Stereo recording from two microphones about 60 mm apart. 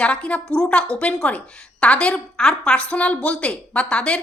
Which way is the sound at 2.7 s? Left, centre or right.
Centre.